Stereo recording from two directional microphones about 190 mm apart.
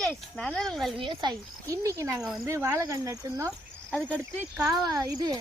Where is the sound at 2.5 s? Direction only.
15° right (ahead or behind).